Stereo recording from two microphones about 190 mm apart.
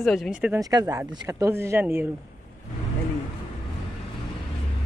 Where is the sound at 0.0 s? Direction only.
Centre (ahead or behind).